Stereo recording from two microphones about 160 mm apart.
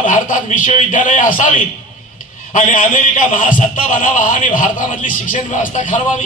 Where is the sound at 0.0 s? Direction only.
55° left (ahead or behind).